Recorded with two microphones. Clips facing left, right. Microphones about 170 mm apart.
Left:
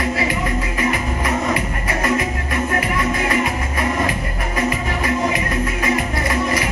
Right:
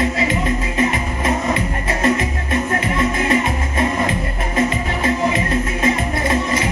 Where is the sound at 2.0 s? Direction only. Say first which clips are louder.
Right 2 dB; 25° right (ahead or behind).